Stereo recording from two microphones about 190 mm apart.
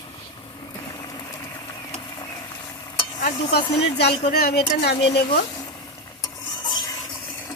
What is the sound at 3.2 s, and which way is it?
Speech, 50° left (ahead or behind).